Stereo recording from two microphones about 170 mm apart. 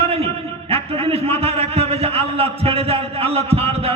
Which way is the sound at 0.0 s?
35° right (ahead or behind).